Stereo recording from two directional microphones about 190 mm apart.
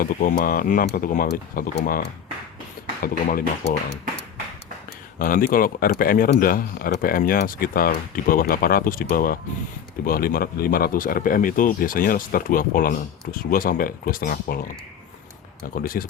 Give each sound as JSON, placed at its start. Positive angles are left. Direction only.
{"t": 0.0, "sound": "speech", "side_deg": 50}
{"t": 3.0, "sound": "speech", "side_deg": 50}
{"t": 5.2, "sound": "speech", "side_deg": 45}
{"t": 15.6, "sound": "speech", "side_deg": 50}